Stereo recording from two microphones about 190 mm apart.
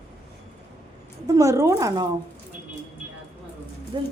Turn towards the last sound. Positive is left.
turn(degrees=-25)  # may be behind; listen again after turning